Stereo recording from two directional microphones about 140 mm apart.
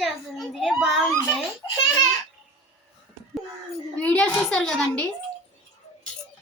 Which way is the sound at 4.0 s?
10° left (ahead or behind).